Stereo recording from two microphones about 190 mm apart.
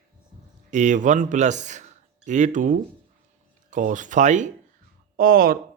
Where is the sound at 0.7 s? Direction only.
40° right (ahead or behind).